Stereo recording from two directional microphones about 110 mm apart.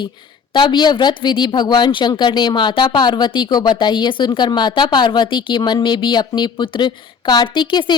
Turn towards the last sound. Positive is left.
turn(degrees=45)  # may be behind; listen again after turning